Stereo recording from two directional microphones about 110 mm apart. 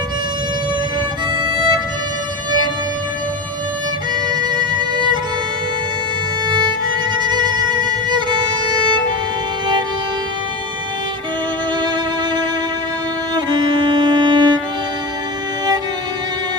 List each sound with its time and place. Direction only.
1.4 s music: 45° right (ahead or behind)
4.3 s music: 45° right (ahead or behind)
7.2 s music: 40° right (ahead or behind)
8.1 s violin: 45° right (ahead or behind)
13.3 s violin: 40° right (ahead or behind)